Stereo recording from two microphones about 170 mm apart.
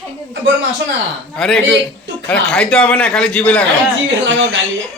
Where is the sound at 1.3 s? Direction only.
5° left (ahead or behind).